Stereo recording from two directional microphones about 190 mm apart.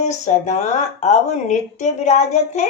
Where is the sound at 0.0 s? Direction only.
40° left (ahead or behind).